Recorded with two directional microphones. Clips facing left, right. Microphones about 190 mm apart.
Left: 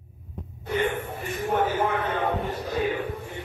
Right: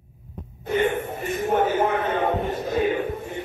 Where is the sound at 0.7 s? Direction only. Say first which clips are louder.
Right 4 dB; 20° right (ahead or behind).